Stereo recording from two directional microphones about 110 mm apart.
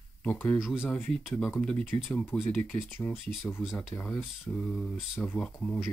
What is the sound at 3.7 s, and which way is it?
Speech, 10° left (ahead or behind).